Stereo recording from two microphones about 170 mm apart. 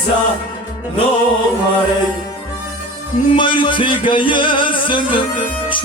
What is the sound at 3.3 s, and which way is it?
Music, 30° left (ahead or behind).